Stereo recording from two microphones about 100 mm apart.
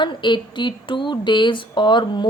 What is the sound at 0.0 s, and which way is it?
Speech, 50° left (ahead or behind).